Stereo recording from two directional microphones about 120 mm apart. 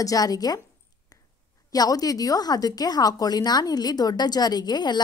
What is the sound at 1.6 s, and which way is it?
A woman's voice, 30° left (ahead or behind).